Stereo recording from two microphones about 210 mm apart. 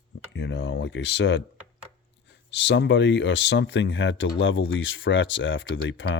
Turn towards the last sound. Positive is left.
turn(degrees=60)  # may be behind; listen again after turning